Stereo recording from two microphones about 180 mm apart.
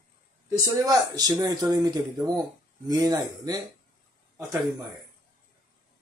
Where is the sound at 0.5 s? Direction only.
20° right (ahead or behind).